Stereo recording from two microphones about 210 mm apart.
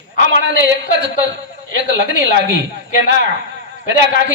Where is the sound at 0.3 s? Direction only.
60° right (ahead or behind).